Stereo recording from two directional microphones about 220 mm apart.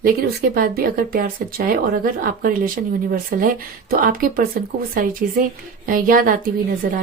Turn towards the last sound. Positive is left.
turn(degrees=-40)  # may be behind; listen again after turning